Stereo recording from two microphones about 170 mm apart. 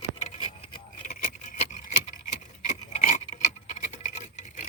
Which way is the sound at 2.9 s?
45° left (ahead or behind).